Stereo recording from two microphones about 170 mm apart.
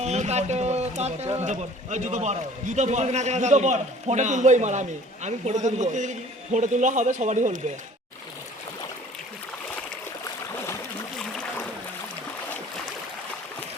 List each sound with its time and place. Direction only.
0.0 s a man's voice: 40° right (ahead or behind)